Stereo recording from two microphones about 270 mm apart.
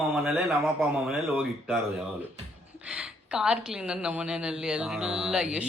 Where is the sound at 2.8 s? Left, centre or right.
Centre.